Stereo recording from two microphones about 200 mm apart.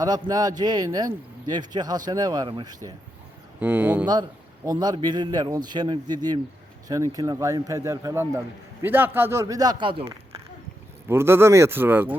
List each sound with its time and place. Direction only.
0.0 s speech: 20° right (ahead or behind)
3.6 s speech: 10° right (ahead or behind)
4.0 s speech: 20° right (ahead or behind)
11.1 s speech: 10° right (ahead or behind)